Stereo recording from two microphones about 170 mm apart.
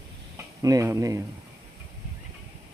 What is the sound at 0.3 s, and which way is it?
Speech, 20° right (ahead or behind).